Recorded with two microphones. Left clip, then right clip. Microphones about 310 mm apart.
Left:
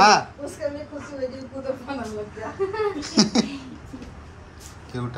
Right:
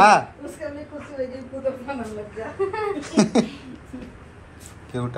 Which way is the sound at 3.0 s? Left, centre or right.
Centre.